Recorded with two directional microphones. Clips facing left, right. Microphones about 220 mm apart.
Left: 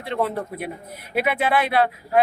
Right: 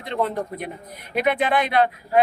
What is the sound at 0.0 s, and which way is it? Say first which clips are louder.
Speech: even; 5° left (ahead or behind).